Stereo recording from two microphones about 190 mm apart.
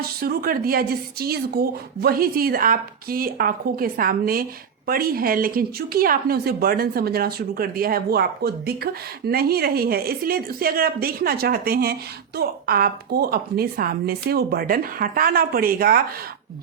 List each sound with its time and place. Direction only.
0.0 s speech: 50° right (ahead or behind)